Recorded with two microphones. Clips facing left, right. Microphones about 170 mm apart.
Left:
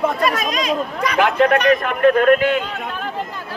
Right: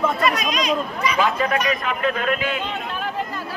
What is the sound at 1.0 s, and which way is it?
Speech, 65° left (ahead or behind).